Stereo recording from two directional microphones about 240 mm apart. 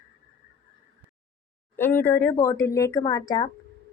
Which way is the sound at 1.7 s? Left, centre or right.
Centre.